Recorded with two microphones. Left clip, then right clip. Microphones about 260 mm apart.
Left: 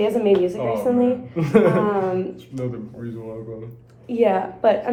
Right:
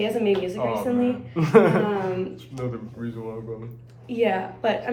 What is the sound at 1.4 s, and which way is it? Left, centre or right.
Speech, centre.